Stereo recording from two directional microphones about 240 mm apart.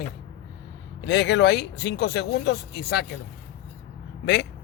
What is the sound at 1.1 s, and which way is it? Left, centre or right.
Speech, left.